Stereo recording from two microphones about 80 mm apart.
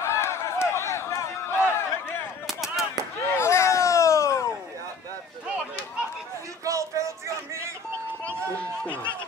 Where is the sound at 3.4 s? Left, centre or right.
Left.